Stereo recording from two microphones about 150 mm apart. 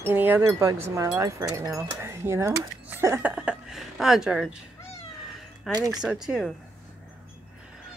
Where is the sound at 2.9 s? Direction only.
15° right (ahead or behind).